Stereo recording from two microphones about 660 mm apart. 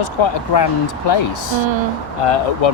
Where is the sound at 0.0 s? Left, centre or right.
Left.